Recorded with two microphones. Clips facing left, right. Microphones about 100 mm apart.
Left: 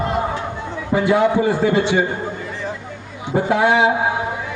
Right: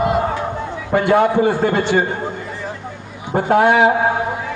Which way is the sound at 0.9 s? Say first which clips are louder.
Right 2 dB; 55° right (ahead or behind).